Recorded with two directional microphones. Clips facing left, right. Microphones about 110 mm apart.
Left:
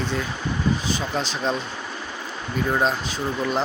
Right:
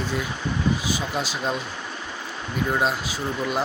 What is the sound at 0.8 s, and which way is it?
Speech, 10° right (ahead or behind).